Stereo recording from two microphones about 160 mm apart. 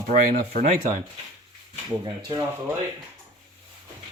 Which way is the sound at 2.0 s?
25° right (ahead or behind).